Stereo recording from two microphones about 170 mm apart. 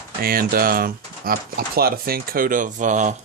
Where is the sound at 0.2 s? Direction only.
60° right (ahead or behind).